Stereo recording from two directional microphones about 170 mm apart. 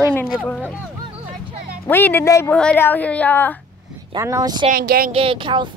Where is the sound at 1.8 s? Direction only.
10° left (ahead or behind).